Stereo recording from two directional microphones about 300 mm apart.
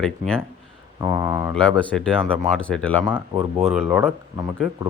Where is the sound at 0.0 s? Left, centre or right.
Centre.